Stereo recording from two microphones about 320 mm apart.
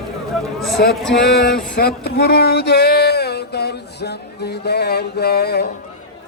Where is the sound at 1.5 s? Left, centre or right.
Centre.